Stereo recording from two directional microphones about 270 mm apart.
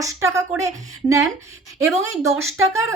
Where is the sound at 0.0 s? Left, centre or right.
Centre.